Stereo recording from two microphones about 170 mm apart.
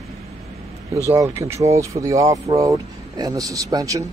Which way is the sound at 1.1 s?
15° right (ahead or behind).